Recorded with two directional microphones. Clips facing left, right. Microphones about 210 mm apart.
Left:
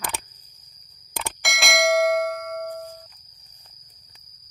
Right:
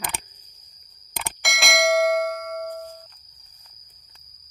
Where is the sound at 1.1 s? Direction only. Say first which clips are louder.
Left 1 dB; centre (ahead or behind).